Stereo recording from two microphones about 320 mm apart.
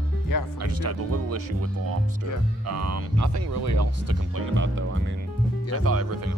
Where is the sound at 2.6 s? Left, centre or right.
Right.